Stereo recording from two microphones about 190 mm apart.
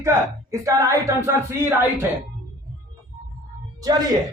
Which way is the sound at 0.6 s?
15° right (ahead or behind).